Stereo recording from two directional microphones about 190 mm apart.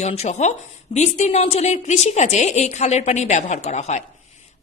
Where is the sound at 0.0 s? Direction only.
35° left (ahead or behind).